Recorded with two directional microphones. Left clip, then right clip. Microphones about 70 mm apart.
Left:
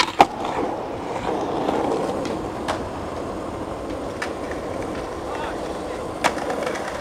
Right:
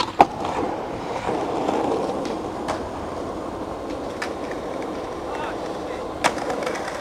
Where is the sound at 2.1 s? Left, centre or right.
Centre.